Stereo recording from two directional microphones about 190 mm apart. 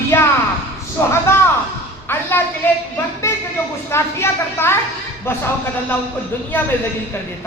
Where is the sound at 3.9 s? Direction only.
15° left (ahead or behind).